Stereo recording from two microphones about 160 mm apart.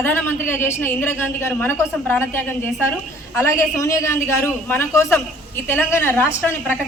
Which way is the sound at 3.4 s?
20° left (ahead or behind).